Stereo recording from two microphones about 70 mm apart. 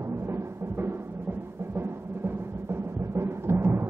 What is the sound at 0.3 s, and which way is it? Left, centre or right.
Music, right.